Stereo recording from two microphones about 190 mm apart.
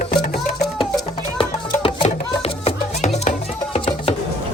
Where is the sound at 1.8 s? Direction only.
30° left (ahead or behind).